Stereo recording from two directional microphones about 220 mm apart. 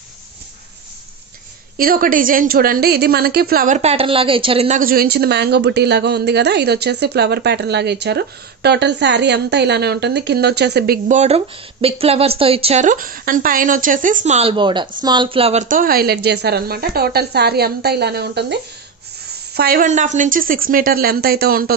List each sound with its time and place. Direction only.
1.8 s a woman's voice: 40° right (ahead or behind)